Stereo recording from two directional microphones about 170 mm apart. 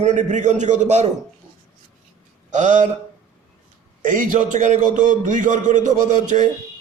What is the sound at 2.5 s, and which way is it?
Speech, 45° right (ahead or behind).